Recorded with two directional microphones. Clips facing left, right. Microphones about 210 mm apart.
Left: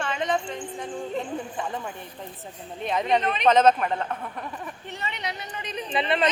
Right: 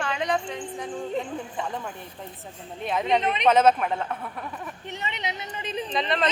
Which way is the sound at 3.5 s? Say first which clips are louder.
Left 1 dB; 5° right (ahead or behind).